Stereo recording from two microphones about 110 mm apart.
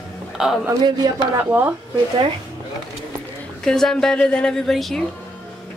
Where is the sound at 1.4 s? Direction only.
20° right (ahead or behind).